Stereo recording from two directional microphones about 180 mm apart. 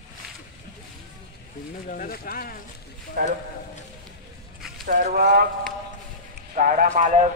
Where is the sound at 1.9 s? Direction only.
50° left (ahead or behind).